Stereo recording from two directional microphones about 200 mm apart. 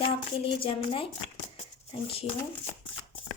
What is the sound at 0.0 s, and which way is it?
Speech, 30° left (ahead or behind).